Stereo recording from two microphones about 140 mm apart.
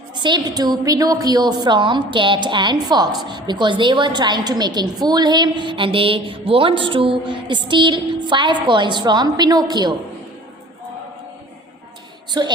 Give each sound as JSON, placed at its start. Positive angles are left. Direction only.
{"t": 0.2, "sound": "a woman's voice", "side_deg": -30}
{"t": 12.4, "sound": "a woman's voice", "side_deg": -30}